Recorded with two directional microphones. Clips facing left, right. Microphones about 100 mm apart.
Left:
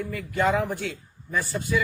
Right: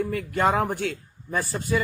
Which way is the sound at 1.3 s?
40° right (ahead or behind).